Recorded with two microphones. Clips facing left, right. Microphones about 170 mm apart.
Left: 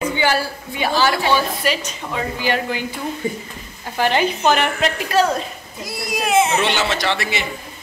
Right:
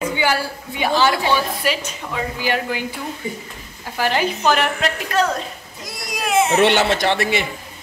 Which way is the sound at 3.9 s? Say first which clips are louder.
Left 2 dB; 5° right (ahead or behind).